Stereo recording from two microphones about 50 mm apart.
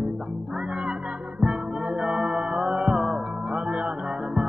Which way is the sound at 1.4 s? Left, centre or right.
Right.